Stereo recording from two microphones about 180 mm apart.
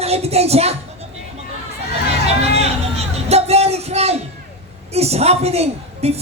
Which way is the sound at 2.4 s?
35° right (ahead or behind).